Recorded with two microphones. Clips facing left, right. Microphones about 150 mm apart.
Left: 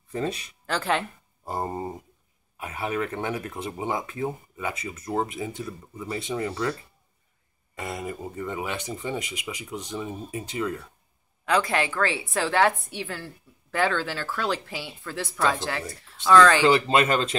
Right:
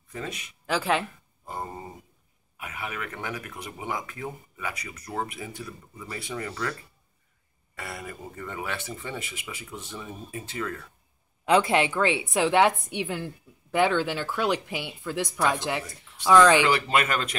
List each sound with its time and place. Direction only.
0.1 s speech: 30° left (ahead or behind)
0.7 s speech: 5° right (ahead or behind)
1.4 s speech: 35° left (ahead or behind); by 10.9 s 20° left (ahead or behind)
11.4 s a woman's voice: 25° right (ahead or behind)
16.6 s speech: 25° left (ahead or behind)